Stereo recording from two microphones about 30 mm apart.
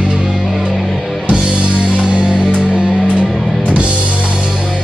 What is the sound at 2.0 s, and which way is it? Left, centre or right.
Music, right.